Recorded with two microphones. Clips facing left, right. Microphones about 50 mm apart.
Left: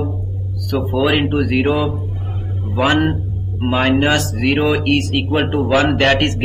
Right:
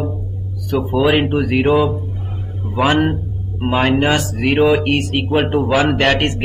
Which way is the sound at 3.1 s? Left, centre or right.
Centre.